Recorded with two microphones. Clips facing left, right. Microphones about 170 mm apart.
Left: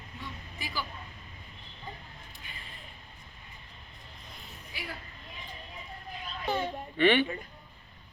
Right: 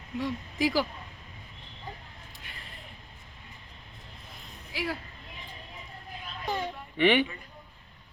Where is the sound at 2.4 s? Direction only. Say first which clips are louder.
Right 1 dB; 75° right (ahead or behind).